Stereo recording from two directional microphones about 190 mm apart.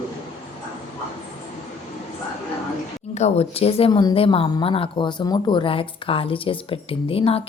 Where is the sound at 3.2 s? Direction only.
35° left (ahead or behind).